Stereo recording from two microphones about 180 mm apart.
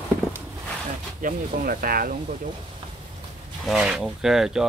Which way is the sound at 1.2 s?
50° right (ahead or behind).